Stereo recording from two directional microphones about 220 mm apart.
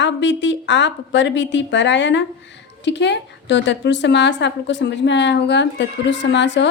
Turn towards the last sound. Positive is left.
turn(degrees=55)  # may be behind; listen again after turning